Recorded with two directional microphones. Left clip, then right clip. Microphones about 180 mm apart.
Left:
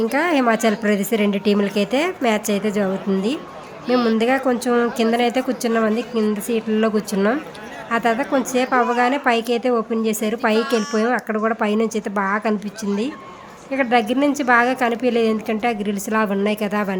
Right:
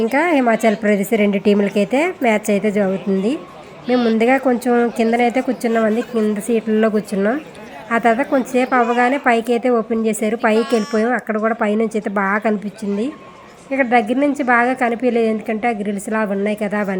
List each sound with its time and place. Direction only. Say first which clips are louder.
0.1 s a woman's voice: right 2 dB; 10° right (ahead or behind)
3.8 s a woman's voice: right 2 dB; 40° left (ahead or behind)
4.2 s a woman's voice: right 3 dB; 15° right (ahead or behind)
10.6 s a woman's voice: right 2 dB; centre (ahead or behind)
13.7 s a woman's voice: right 2 dB; 10° right (ahead or behind)